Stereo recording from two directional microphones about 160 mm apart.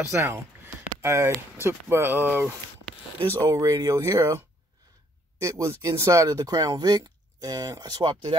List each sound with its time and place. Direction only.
0.0 s speech: 15° right (ahead or behind)